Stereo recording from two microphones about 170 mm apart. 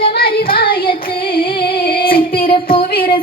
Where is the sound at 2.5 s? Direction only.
30° left (ahead or behind).